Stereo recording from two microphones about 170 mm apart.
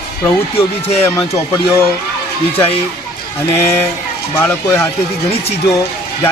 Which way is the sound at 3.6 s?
15° left (ahead or behind).